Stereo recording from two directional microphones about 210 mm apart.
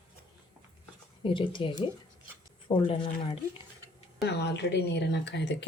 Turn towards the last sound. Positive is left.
turn(degrees=55)  # may be behind; listen again after turning